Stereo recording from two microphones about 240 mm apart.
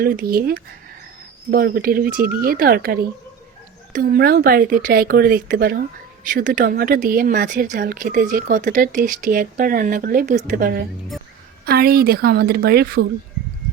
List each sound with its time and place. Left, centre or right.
0.0 s speech: right